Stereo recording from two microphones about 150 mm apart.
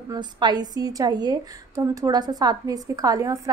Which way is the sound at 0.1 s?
30° right (ahead or behind).